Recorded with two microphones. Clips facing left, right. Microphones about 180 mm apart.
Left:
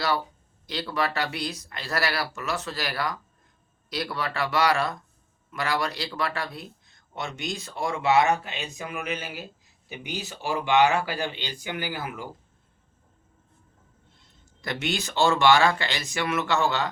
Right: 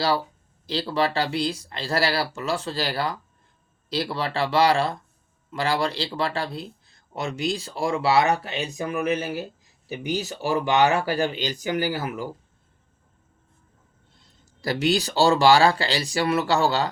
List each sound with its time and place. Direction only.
0.7 s speech: 30° right (ahead or behind)
14.6 s speech: 35° right (ahead or behind)